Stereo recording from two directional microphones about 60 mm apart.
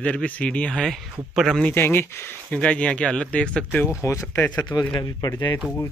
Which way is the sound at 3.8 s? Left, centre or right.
Left.